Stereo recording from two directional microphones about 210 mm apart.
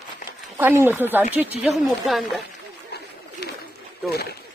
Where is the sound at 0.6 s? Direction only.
10° right (ahead or behind).